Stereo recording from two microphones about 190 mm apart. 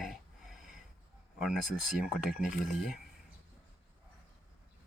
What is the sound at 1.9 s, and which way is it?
Speech, centre (ahead or behind).